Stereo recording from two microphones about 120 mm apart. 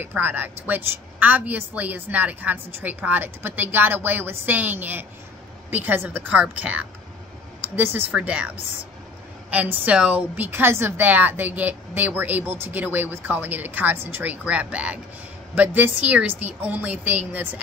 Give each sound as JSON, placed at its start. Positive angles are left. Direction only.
{"t": 0.0, "sound": "a woman's voice", "side_deg": -15}